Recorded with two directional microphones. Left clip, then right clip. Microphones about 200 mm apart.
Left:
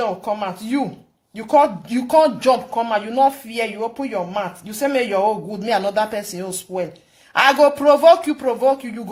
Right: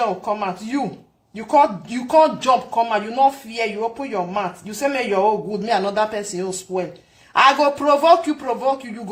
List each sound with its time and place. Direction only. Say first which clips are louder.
0.0 s speech: right 1 dB; 35° left (ahead or behind)